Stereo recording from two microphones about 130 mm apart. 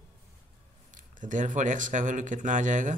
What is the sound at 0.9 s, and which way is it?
Speech, 85° right.